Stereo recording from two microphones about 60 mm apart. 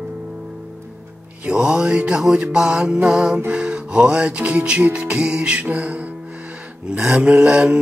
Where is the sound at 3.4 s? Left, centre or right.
Centre.